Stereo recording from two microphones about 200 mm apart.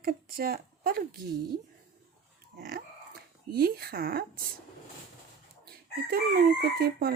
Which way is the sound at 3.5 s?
50° right (ahead or behind).